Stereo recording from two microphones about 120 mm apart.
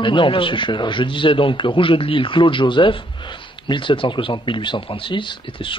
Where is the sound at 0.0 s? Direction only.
45° left (ahead or behind).